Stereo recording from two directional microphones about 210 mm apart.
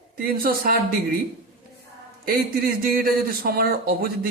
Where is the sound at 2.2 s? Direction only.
45° right (ahead or behind).